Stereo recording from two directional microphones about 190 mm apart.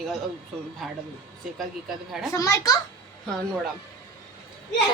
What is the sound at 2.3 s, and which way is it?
Speech, 15° left (ahead or behind).